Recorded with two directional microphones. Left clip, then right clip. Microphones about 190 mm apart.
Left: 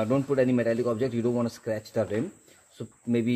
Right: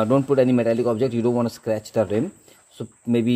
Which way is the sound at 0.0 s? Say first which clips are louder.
Right 6 dB; 25° right (ahead or behind).